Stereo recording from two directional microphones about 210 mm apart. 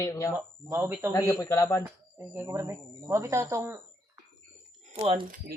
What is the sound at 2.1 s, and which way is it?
Speech, 10° right (ahead or behind).